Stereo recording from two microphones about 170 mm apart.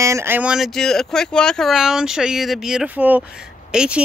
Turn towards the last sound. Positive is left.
turn(degrees=-5)  # may be behind; listen again after turning